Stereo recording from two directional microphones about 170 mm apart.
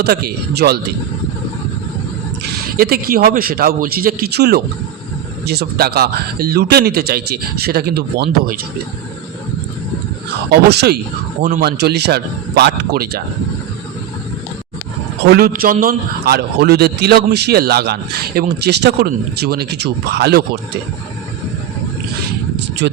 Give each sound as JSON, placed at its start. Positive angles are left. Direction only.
{"t": 0.0, "sound": "a man's voice", "side_deg": -65}
{"t": 2.7, "sound": "a man's voice", "side_deg": -60}
{"t": 10.5, "sound": "a man's voice", "side_deg": -70}
{"t": 15.3, "sound": "a man's voice", "side_deg": -60}